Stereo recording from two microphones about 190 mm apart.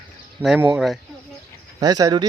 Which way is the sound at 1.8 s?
20° right (ahead or behind).